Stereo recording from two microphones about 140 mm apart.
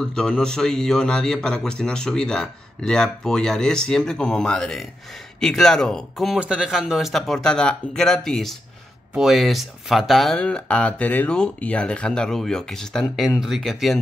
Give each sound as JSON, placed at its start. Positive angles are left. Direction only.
{"t": 0.0, "sound": "speech", "side_deg": 5}